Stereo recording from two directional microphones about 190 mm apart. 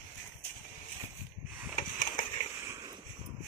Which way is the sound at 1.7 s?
40° left (ahead or behind).